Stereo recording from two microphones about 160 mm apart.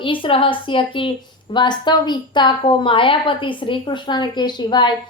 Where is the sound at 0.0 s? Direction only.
30° left (ahead or behind).